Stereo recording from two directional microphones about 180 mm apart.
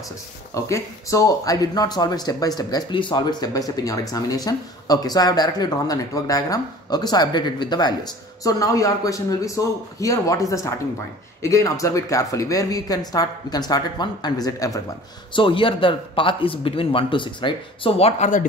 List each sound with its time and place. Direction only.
0.6 s speech: 15° left (ahead or behind); by 18.4 s 35° left (ahead or behind)